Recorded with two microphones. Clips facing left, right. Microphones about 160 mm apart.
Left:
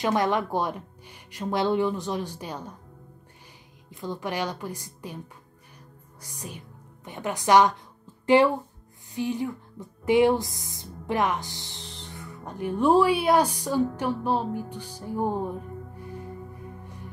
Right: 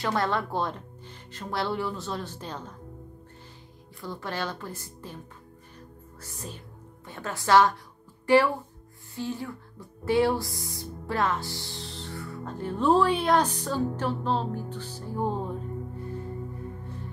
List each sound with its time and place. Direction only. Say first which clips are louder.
0.0 s speech: left 3 dB; 15° left (ahead or behind)
3.9 s speech: left 4 dB; 20° left (ahead or behind)
6.2 s speech: left 1 dB; 15° left (ahead or behind)
16.0 s singing bowl: right 3 dB; 15° left (ahead or behind)